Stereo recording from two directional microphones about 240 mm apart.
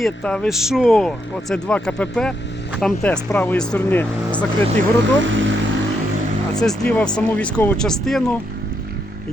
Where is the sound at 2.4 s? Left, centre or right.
Left.